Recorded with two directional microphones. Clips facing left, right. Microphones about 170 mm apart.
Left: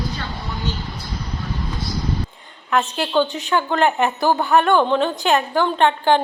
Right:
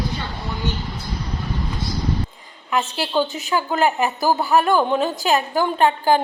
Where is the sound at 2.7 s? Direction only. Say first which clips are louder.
Left 2 dB; 5° right (ahead or behind).